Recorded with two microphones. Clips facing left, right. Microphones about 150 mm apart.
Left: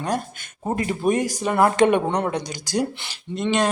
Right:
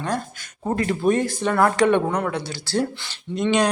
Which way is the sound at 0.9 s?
15° left (ahead or behind).